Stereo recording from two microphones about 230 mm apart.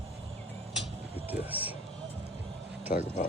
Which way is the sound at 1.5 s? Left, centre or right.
Centre.